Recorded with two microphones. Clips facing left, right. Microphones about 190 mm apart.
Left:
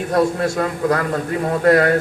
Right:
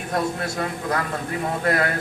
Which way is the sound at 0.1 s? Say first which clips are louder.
Left 7 dB; 45° left (ahead or behind).